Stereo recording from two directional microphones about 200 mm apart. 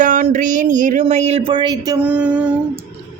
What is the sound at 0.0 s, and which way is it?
Speech, 40° right (ahead or behind).